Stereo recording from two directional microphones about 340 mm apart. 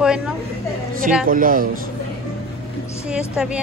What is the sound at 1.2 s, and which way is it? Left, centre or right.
Speech, right.